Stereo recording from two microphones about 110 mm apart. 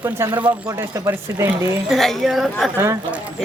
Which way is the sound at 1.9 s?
Centre (ahead or behind).